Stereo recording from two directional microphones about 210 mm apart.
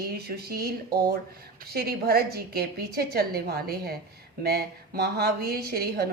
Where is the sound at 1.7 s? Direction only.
45° right (ahead or behind).